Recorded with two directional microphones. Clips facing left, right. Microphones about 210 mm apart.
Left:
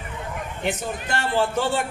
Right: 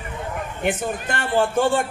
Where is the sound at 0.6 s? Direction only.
55° right (ahead or behind).